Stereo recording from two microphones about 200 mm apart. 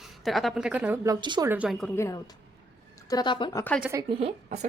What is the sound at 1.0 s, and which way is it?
Speech, 20° right (ahead or behind).